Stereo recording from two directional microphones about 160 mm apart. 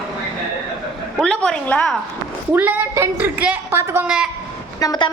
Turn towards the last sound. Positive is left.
turn(degrees=25)  # may be behind; listen again after turning